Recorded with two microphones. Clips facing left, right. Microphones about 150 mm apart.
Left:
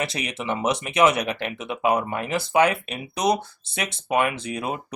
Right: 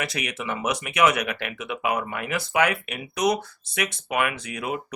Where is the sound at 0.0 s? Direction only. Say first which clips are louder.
Left 2 dB; 25° left (ahead or behind).